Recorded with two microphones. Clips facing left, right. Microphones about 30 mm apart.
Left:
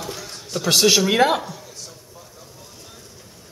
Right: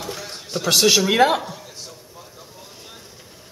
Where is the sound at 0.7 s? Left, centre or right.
Centre.